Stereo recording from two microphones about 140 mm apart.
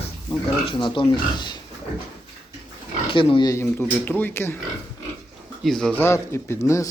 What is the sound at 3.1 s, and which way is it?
Speech, 35° left (ahead or behind).